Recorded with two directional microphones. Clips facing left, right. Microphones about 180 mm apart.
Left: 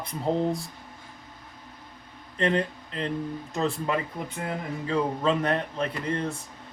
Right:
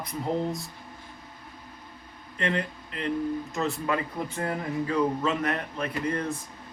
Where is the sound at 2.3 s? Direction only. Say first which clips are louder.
Left 4 dB; 30° left (ahead or behind).